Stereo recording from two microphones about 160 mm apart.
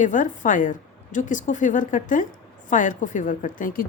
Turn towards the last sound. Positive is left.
turn(degrees=60)  # may be behind; listen again after turning